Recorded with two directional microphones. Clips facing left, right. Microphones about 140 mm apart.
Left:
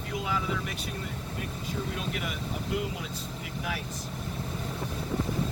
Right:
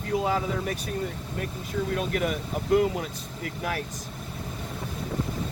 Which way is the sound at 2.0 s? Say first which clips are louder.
Right 7 dB; 45° right (ahead or behind).